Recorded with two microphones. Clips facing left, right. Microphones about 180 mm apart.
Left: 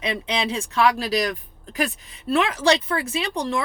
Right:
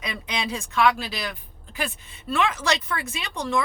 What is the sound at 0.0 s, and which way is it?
Speech, 30° left (ahead or behind).